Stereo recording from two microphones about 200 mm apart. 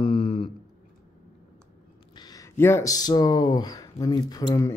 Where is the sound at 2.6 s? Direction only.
15° left (ahead or behind).